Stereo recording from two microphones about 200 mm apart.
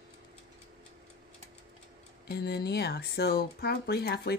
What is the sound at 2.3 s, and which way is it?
Speech, 55° left (ahead or behind).